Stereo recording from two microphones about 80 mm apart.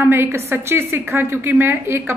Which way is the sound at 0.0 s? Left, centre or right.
Right.